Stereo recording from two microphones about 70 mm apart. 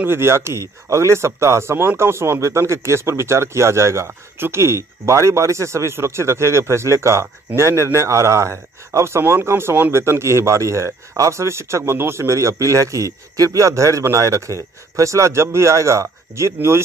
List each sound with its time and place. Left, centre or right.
0.0 s speech: right